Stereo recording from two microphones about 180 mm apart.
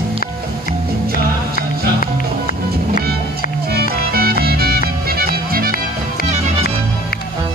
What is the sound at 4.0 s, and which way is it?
Music, 60° right (ahead or behind).